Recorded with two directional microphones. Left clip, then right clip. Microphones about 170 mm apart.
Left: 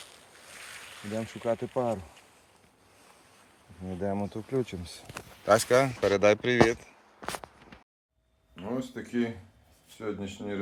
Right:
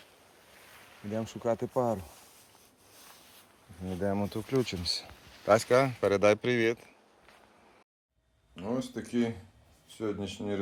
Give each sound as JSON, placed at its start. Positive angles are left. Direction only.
{"t": 1.1, "sound": "speech", "side_deg": -10}
{"t": 3.8, "sound": "speech", "side_deg": -20}
{"t": 5.5, "sound": "speech", "side_deg": 0}
{"t": 8.5, "sound": "a sound", "side_deg": -20}
{"t": 10.0, "sound": "speech", "side_deg": -35}